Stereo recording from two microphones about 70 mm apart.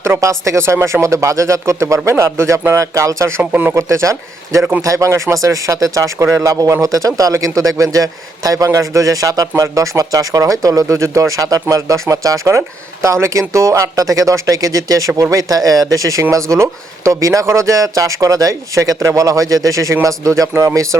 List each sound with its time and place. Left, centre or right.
0.0 s speech: right
3.5 s speech: right
3.8 s speech: right
10.9 s speech: right